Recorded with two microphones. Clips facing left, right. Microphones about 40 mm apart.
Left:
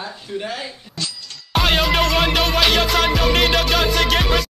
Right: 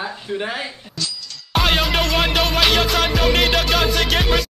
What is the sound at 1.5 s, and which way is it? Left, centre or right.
Music, centre.